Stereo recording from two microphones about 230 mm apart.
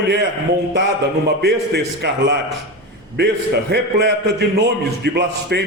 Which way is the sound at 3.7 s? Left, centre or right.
Right.